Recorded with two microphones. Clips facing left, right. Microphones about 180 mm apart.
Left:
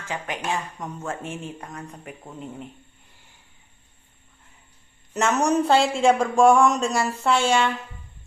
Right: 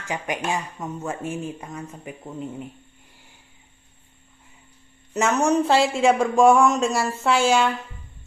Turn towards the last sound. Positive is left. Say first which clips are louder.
# right 1 dB
turn(degrees=-5)  # may be behind; listen again after turning